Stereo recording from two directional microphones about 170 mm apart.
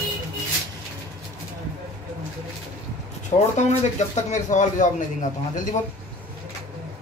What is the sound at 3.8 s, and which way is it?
Speech, 45° left (ahead or behind).